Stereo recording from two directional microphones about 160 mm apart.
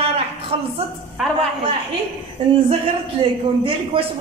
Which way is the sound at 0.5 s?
35° right (ahead or behind).